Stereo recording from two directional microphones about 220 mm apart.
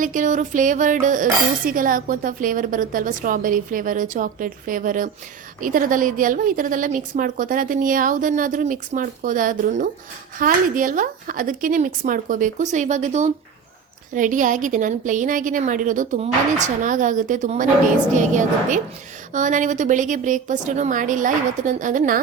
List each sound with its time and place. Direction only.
0.0 s cutlery: 35° right (ahead or behind)